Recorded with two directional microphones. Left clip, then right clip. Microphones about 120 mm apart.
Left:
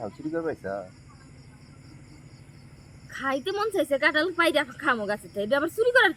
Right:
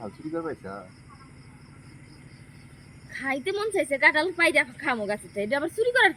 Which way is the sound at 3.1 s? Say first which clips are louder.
Left 1 dB; 30° left (ahead or behind).